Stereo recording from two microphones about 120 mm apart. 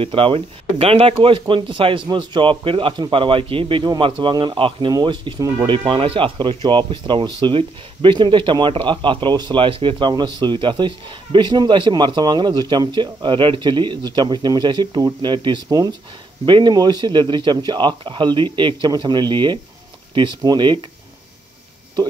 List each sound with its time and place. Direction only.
0.0 s a man's voice: 50° right (ahead or behind)